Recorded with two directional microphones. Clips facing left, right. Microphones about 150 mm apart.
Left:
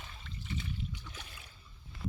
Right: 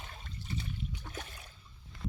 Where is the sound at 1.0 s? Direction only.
50° right (ahead or behind).